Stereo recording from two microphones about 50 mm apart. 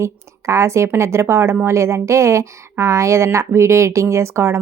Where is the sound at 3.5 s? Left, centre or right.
Right.